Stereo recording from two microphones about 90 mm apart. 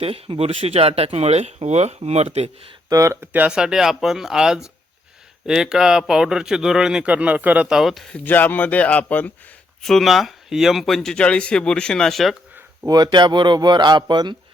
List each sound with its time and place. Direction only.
0.0 s speech: 90° right
2.9 s speech: 35° right (ahead or behind)
3.3 s speech: 15° right (ahead or behind)
7.7 s speech: 5° right (ahead or behind)
8.1 s speech: 20° left (ahead or behind)
9.8 s speech: centre (ahead or behind)
12.9 s a man's voice: 55° right (ahead or behind)